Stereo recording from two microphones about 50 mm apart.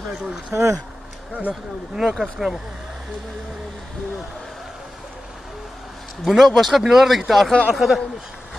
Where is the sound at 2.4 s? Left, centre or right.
Centre.